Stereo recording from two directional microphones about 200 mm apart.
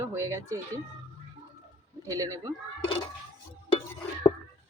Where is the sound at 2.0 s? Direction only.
15° right (ahead or behind).